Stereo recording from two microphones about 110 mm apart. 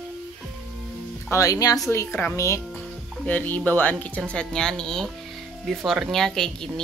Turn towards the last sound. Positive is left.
turn(degrees=5)  # may be behind; listen again after turning